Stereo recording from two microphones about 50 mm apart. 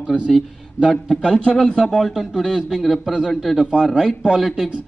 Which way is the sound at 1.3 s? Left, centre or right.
Centre.